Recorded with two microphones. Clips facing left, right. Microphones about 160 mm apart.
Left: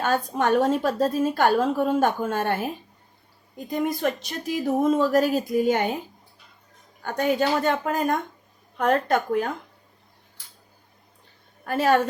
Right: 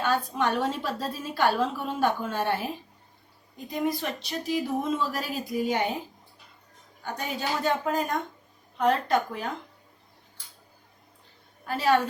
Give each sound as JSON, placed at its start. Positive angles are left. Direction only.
{"t": 0.0, "sound": "a woman's voice", "side_deg": 45}
{"t": 3.7, "sound": "a woman's voice", "side_deg": 45}
{"t": 7.0, "sound": "a woman's voice", "side_deg": 55}
{"t": 11.6, "sound": "a woman's voice", "side_deg": 50}